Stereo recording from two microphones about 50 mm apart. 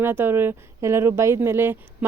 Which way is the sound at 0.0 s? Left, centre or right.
Right.